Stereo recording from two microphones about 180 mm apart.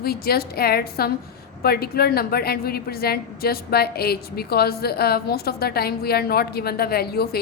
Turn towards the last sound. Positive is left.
turn(degrees=60)  # may be behind; listen again after turning